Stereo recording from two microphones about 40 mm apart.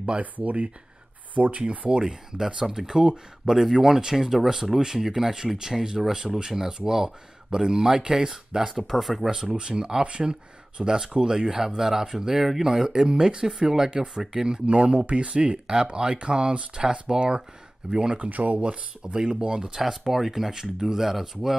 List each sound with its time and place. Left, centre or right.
0.2 s speech: right
1.9 s speech: centre
2.6 s speech: centre
8.7 s speech: centre
9.3 s speech: centre
10.8 s speech: centre
18.1 s speech: right; by 19.8 s centre
19.8 s speech: centre